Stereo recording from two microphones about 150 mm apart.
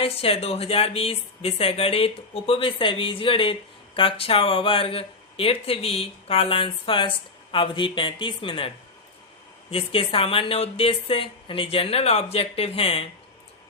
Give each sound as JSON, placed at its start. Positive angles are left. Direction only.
{"t": 0.0, "sound": "speech", "side_deg": 40}